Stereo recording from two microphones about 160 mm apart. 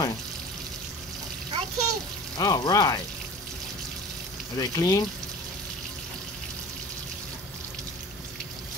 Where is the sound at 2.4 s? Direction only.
25° left (ahead or behind).